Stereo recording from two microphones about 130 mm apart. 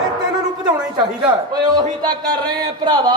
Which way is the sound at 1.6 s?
30° right (ahead or behind).